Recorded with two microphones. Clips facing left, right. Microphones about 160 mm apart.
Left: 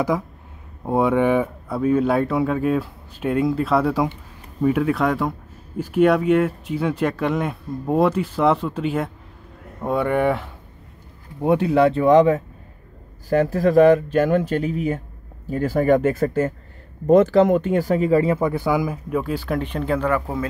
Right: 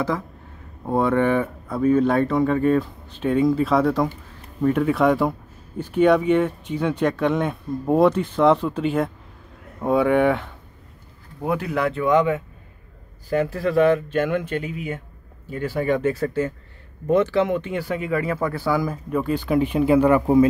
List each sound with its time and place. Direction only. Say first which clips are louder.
0.8 s speech: left 1 dB; 10° left (ahead or behind)
11.4 s speech: left 7 dB; 30° left (ahead or behind); by 19.6 s centre (ahead or behind)
19.6 s a man's voice: right 6 dB; 10° right (ahead or behind)